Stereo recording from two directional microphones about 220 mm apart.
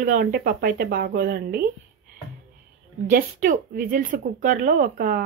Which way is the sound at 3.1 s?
40° right (ahead or behind).